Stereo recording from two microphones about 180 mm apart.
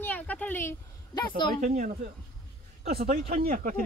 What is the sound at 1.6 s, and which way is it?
Speech, 45° right (ahead or behind).